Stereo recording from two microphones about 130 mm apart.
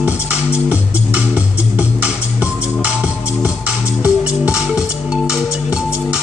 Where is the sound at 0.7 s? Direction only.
10° right (ahead or behind).